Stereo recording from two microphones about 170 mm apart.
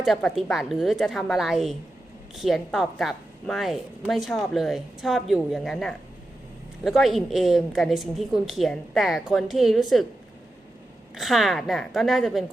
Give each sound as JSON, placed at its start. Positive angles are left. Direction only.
{"t": 0.0, "sound": "a woman's voice", "side_deg": 0}
{"t": 11.1, "sound": "a woman's voice", "side_deg": 0}